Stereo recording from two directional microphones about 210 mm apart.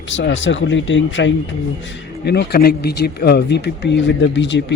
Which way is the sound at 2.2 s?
50° left (ahead or behind).